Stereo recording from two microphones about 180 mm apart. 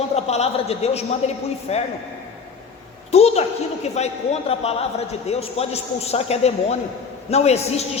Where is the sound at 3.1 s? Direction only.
35° left (ahead or behind).